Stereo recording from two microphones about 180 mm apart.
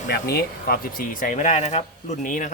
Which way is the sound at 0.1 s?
60° left (ahead or behind).